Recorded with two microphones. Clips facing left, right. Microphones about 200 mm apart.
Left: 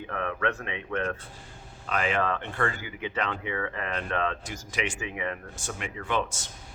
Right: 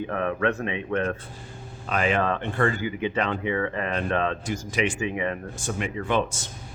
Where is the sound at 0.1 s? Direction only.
20° right (ahead or behind).